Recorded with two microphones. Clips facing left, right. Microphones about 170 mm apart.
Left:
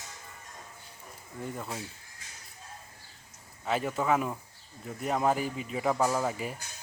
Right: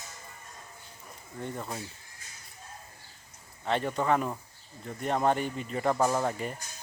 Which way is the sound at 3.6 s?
5° left (ahead or behind).